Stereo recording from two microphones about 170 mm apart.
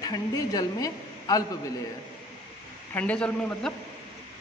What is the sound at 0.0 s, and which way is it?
A woman's voice, 20° left (ahead or behind).